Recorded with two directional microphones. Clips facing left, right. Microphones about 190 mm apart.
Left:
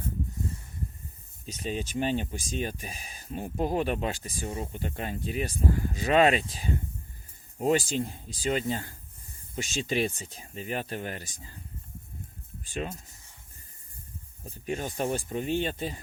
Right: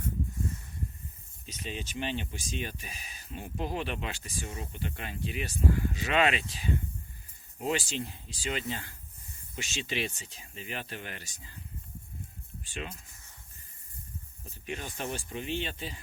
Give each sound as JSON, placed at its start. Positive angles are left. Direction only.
{"t": 1.5, "sound": "speech", "side_deg": 40}
{"t": 12.7, "sound": "speech", "side_deg": 40}
{"t": 14.4, "sound": "speech", "side_deg": 40}